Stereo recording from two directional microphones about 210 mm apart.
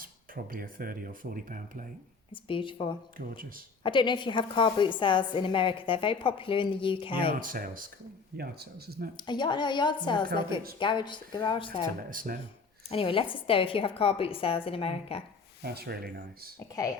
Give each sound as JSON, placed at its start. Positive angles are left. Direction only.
{"t": 0.0, "sound": "speech", "side_deg": -40}
{"t": 2.3, "sound": "a woman's voice", "side_deg": 25}
{"t": 3.2, "sound": "speech", "side_deg": -40}
{"t": 3.8, "sound": "a woman's voice", "side_deg": 20}
{"t": 7.3, "sound": "speech", "side_deg": -40}
{"t": 9.1, "sound": "a woman's voice", "side_deg": 20}
{"t": 12.1, "sound": "speech", "side_deg": -40}
{"t": 12.9, "sound": "a woman's voice", "side_deg": 25}
{"t": 15.6, "sound": "speech", "side_deg": -50}
{"t": 16.6, "sound": "speech", "side_deg": 15}